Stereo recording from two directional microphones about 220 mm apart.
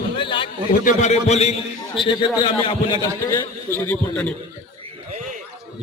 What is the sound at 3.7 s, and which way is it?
Speech, 10° left (ahead or behind).